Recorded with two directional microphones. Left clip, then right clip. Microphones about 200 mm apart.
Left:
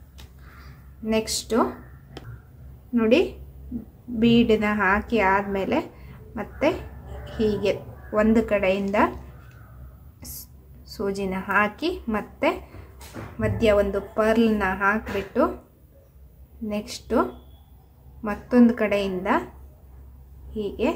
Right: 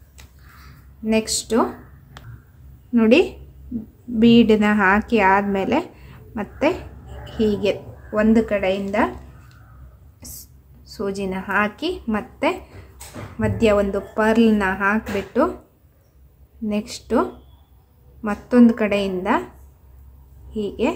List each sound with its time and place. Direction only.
1.0 s a woman's voice: 15° right (ahead or behind)
2.9 s a woman's voice: 25° right (ahead or behind); by 9.1 s 5° right (ahead or behind)
10.2 s a woman's voice: 10° right (ahead or behind)
16.6 s a woman's voice: 15° right (ahead or behind)
20.5 s a woman's voice: 15° right (ahead or behind)